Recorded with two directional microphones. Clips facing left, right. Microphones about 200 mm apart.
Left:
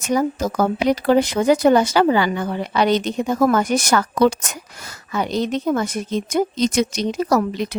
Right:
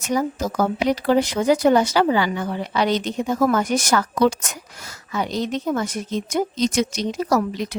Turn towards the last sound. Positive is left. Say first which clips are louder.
# left 2 dB
turn(degrees=65)  # may be behind; listen again after turning